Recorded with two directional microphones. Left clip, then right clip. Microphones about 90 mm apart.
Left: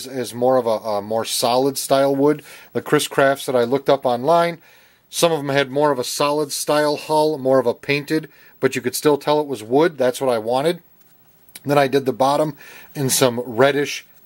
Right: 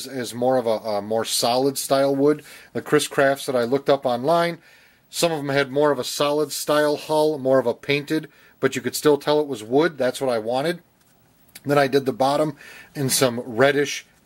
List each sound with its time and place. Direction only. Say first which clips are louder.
0.0 s speech: left 3 dB; 20° left (ahead or behind)